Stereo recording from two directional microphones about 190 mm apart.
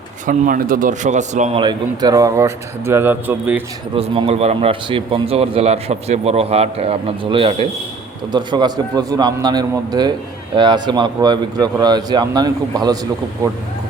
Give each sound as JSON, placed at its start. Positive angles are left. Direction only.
{"t": 0.3, "sound": "speech", "side_deg": -45}
{"t": 1.6, "sound": "speech", "side_deg": -20}
{"t": 3.9, "sound": "a man's voice", "side_deg": -30}